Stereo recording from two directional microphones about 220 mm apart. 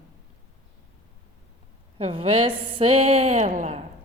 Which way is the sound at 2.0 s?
25° right (ahead or behind).